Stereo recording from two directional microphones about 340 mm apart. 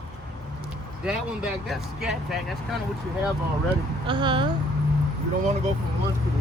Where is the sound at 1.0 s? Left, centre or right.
Centre.